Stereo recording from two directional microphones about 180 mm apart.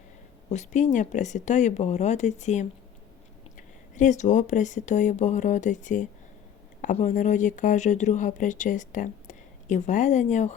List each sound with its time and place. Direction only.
0.5 s speech: 40° left (ahead or behind)
3.9 s speech: 45° left (ahead or behind)